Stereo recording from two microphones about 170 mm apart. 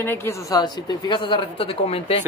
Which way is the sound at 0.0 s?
15° left (ahead or behind).